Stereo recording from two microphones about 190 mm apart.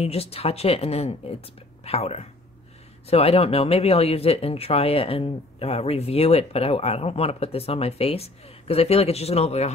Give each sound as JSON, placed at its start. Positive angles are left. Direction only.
{"t": 0.0, "sound": "speech", "side_deg": 30}